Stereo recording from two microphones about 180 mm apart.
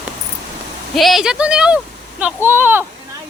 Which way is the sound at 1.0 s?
Centre (ahead or behind).